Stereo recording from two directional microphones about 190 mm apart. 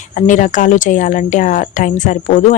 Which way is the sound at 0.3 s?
40° left (ahead or behind).